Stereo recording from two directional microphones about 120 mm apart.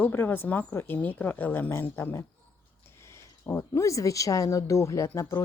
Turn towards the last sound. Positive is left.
turn(degrees=25)  # may be behind; listen again after turning